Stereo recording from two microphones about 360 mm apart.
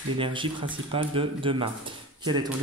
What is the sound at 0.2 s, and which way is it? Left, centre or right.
Speech, centre.